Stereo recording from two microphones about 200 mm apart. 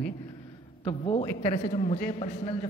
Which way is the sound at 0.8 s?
25° left (ahead or behind).